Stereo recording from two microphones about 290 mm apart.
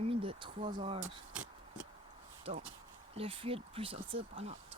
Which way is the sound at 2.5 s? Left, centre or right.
Centre.